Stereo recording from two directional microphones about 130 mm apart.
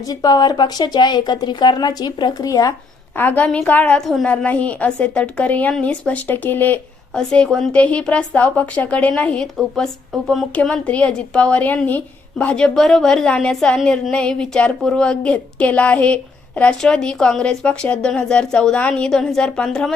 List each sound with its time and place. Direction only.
0.1 s speech: 30° left (ahead or behind)
3.2 s a woman's voice: 15° left (ahead or behind)